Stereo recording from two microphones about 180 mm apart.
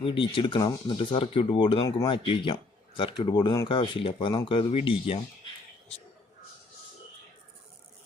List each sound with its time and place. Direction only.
0.0 s speech: 30° left (ahead or behind)